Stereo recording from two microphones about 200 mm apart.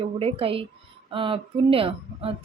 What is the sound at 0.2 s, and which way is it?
Speech, 30° right (ahead or behind).